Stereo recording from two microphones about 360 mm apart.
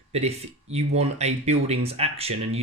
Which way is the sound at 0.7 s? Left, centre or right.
Centre.